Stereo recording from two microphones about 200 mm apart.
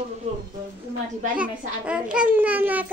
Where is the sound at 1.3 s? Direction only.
5° right (ahead or behind).